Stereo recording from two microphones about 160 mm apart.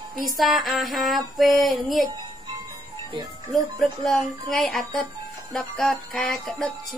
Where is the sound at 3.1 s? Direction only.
25° right (ahead or behind).